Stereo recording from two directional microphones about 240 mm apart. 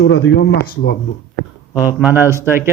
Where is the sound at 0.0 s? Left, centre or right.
Left.